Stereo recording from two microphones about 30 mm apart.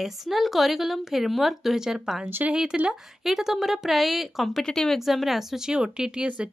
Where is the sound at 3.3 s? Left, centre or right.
Centre.